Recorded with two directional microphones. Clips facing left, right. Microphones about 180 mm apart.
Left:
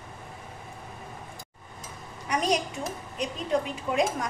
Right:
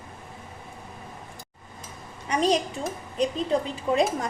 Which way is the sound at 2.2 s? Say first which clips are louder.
Right 3 dB; 30° right (ahead or behind).